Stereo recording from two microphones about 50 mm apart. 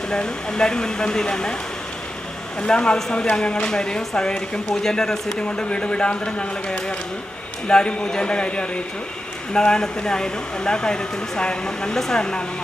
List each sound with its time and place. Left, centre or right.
0.1 s speech: centre
2.6 s speech: centre
5.4 s speech: left